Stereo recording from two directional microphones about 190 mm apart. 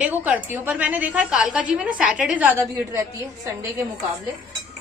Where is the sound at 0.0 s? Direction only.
10° right (ahead or behind).